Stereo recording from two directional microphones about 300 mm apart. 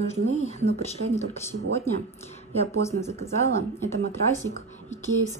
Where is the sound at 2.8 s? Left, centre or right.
Centre.